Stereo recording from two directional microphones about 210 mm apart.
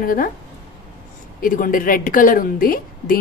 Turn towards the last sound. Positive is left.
turn(degrees=45)  # may be behind; listen again after turning